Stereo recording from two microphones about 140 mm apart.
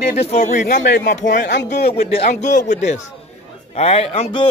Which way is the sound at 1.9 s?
45° left (ahead or behind).